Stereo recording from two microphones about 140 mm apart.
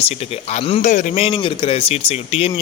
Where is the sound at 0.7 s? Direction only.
60° left (ahead or behind).